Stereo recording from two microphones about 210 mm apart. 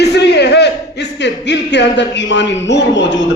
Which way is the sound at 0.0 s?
50° left (ahead or behind).